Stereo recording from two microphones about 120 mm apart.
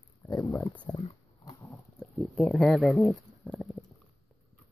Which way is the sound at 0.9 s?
25° left (ahead or behind).